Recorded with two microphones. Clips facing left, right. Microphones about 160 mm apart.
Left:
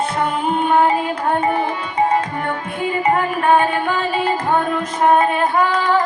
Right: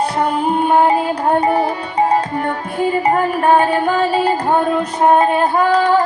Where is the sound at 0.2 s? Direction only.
35° right (ahead or behind).